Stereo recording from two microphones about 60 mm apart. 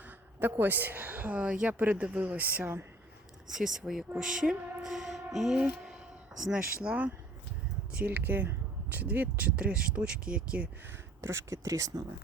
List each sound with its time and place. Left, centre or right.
0.3 s a woman's voice: right
3.5 s speech: centre
4.8 s music: centre
6.4 s speech: centre
7.9 s speech: right
11.2 s speech: right